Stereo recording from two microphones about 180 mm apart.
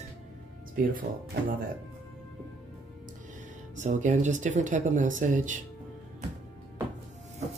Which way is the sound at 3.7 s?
40° right (ahead or behind).